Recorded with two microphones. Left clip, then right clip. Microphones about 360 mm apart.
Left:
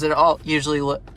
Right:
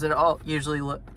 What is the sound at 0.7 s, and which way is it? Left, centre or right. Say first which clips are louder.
Speech: left 7 dB; left.